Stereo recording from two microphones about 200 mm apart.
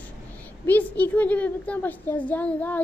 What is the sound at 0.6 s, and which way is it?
A woman's voice, 10° left (ahead or behind).